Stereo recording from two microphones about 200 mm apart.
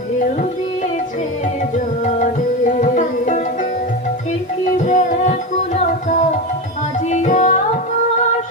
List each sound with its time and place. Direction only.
1.7 s music: 40° left (ahead or behind)
4.9 s music: 40° left (ahead or behind)